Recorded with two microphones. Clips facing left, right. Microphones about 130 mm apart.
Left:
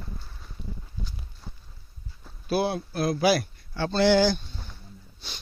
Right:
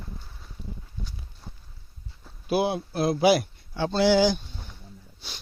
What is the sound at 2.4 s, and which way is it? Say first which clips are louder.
A man's voice: right 1 dB; 15° right (ahead or behind).